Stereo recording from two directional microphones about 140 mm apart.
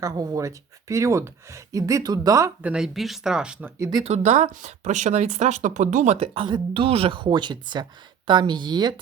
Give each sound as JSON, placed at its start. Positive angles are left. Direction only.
{"t": 0.0, "sound": "speech", "side_deg": -25}
{"t": 2.6, "sound": "speech", "side_deg": -10}
{"t": 3.8, "sound": "speech", "side_deg": -30}
{"t": 4.0, "sound": "speech", "side_deg": -55}
{"t": 6.1, "sound": "speech", "side_deg": -40}